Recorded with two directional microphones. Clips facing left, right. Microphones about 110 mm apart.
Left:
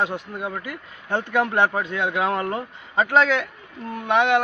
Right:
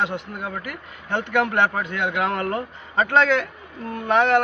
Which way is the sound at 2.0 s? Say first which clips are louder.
Even; 30° left (ahead or behind).